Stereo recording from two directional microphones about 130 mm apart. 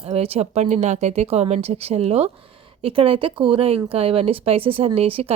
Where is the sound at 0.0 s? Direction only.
50° right (ahead or behind).